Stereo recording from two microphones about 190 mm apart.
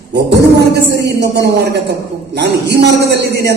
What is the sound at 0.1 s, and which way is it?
A man's voice, 60° right (ahead or behind).